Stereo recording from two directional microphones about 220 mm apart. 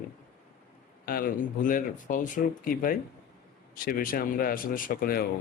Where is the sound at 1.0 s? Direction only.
40° left (ahead or behind).